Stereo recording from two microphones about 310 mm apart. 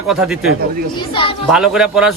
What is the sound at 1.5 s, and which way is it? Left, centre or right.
Speech, centre.